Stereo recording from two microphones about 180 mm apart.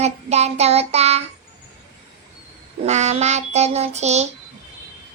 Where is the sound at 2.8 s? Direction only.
40° right (ahead or behind).